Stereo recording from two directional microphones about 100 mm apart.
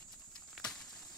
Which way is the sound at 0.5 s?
5° left (ahead or behind).